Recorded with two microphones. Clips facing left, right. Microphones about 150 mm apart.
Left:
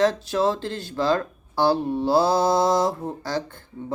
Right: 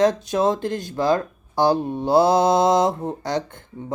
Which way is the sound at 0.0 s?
15° right (ahead or behind).